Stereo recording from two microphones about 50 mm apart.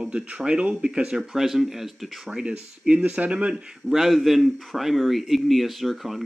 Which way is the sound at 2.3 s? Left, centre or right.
Right.